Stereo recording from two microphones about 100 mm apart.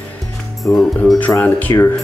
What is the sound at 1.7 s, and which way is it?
Speech, 35° left (ahead or behind).